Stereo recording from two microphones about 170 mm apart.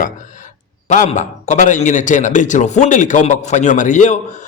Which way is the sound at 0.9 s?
45° left (ahead or behind).